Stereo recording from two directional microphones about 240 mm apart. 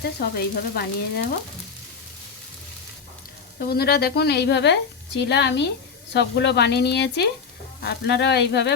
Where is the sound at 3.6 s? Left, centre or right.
Left.